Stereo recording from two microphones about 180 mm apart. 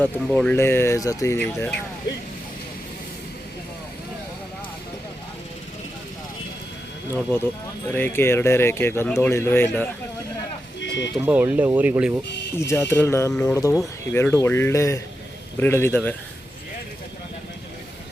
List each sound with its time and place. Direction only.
0.0 s speech: 5° left (ahead or behind)
7.9 s speech: 10° left (ahead or behind)
10.8 s a sound: 75° left (ahead or behind)
11.2 s speech: 10° right (ahead or behind)
12.5 s speech: 15° left (ahead or behind)